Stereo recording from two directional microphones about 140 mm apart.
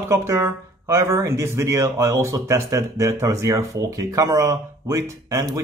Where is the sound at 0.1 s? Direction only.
20° right (ahead or behind).